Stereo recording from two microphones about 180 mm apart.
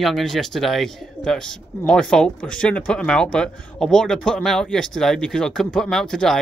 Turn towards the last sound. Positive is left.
turn(degrees=5)  # may be behind; listen again after turning